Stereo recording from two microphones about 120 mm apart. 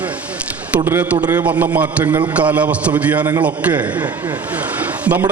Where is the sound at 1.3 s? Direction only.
15° right (ahead or behind).